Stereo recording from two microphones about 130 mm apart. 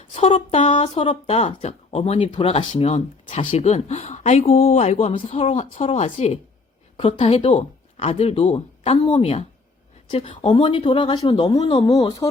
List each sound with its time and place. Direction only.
0.1 s a woman's voice: 45° left (ahead or behind)